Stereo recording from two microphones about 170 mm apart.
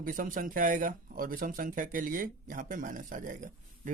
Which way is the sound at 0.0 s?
55° right (ahead or behind).